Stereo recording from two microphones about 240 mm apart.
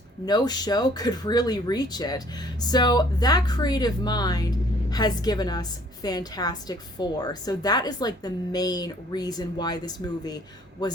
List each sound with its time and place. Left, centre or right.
0.3 s a woman's voice: centre